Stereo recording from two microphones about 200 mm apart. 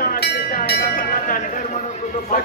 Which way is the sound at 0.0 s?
50° left (ahead or behind).